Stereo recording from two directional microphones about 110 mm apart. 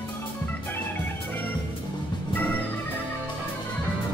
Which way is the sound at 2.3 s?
15° left (ahead or behind).